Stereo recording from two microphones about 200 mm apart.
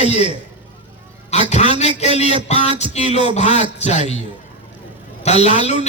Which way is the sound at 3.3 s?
35° left (ahead or behind).